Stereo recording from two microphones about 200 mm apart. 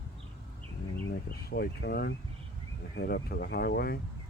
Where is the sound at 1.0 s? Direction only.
50° left (ahead or behind).